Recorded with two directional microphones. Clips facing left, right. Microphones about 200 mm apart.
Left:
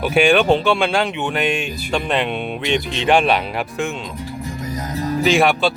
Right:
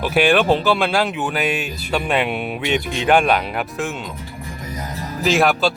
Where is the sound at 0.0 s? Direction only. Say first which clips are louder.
Left 1 dB; centre (ahead or behind).